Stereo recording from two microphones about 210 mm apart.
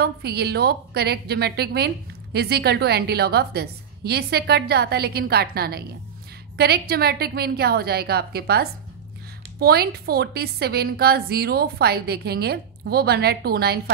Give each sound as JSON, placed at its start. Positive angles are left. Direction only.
{"t": 0.0, "sound": "a woman's voice", "side_deg": -50}